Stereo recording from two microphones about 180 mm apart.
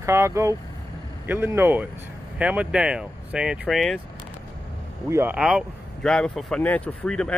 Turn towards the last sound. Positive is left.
turn(degrees=5)  # may be behind; listen again after turning